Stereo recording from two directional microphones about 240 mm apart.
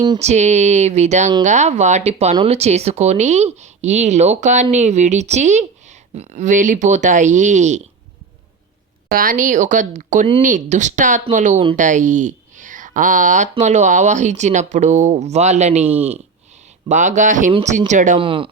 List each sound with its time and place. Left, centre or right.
0.0 s speech: right
9.0 s speech: right
15.9 s speech: centre
16.9 s speech: right